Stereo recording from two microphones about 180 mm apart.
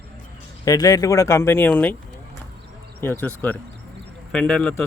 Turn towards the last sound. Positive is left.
turn(degrees=5)  # may be behind; listen again after turning